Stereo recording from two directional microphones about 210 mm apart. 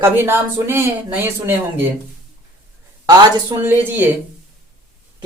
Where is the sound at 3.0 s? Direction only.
15° right (ahead or behind).